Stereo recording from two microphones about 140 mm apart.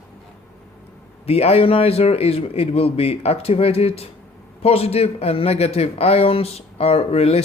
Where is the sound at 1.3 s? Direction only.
45° left (ahead or behind).